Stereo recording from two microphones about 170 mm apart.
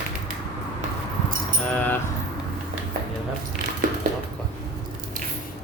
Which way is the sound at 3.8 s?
55° right (ahead or behind).